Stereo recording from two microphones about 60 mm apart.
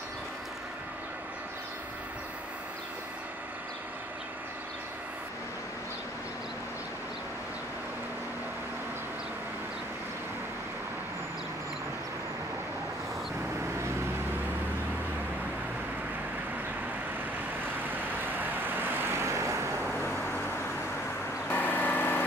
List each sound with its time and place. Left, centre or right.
18.2 s vehicle: right
19.2 s vehicle: right
21.5 s vehicle: left